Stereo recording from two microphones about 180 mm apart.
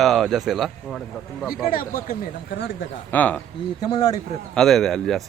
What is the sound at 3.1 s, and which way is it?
Speech, 10° left (ahead or behind).